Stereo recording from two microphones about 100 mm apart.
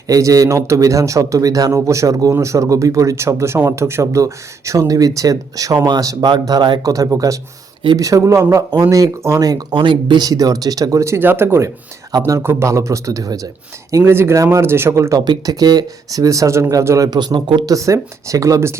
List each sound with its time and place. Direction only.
0.1 s a man's voice: 35° right (ahead or behind); by 10.2 s 55° right (ahead or behind)
10.2 s a man's voice: 35° right (ahead or behind)
15.2 s a man's voice: 40° right (ahead or behind)
17.1 s speech: 45° right (ahead or behind)
17.7 s a man's voice: 35° right (ahead or behind)